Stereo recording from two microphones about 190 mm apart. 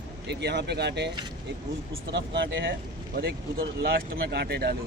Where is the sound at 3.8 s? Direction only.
55° right (ahead or behind).